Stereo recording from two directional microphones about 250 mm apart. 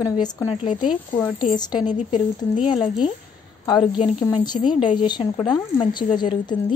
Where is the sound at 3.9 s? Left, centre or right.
Centre.